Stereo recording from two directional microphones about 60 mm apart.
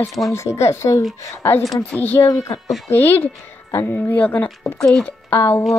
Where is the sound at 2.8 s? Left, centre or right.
Left.